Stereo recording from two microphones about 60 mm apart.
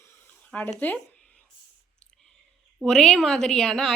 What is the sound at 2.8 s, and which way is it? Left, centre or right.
A woman's voice, centre.